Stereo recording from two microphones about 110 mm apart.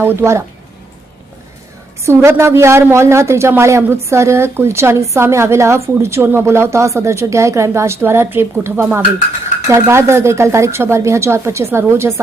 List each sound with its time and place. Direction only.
0.0 s a woman's voice: 20° right (ahead or behind)
2.0 s a woman's voice: 25° right (ahead or behind)